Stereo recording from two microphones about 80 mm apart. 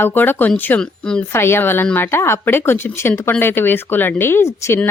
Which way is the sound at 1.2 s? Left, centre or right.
Left.